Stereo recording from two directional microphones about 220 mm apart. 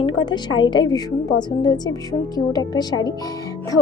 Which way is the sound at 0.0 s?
20° left (ahead or behind).